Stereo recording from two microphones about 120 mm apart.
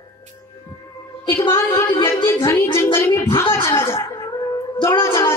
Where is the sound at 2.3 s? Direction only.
20° left (ahead or behind).